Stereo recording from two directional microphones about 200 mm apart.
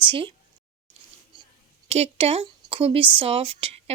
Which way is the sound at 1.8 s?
30° right (ahead or behind).